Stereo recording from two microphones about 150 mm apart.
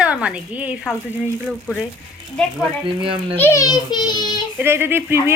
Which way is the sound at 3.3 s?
20° left (ahead or behind).